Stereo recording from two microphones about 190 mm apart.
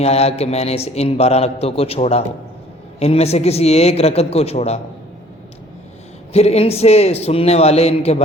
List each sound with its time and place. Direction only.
0.0 s a man's voice: 35° left (ahead or behind)
6.3 s a man's voice: 35° left (ahead or behind)